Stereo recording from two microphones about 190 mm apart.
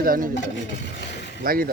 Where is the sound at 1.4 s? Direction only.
50° right (ahead or behind).